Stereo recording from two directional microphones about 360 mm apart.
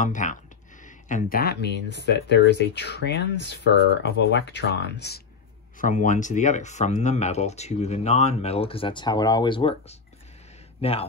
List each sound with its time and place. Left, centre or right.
0.0 s speech: left